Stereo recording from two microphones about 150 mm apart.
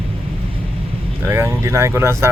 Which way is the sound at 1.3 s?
20° right (ahead or behind).